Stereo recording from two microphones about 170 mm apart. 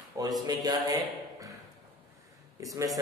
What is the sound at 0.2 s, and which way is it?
Speech, 20° right (ahead or behind).